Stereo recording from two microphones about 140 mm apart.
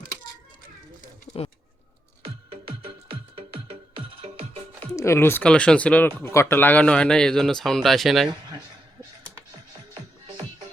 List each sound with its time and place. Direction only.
1.3 s a sound: 65° left (ahead or behind)
2.5 s music: 40° right (ahead or behind)
4.9 s speech: 20° left (ahead or behind); by 8.3 s centre (ahead or behind)